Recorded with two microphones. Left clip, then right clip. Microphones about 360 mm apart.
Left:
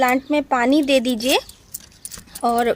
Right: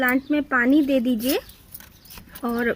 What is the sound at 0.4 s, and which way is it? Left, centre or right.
Speech, left.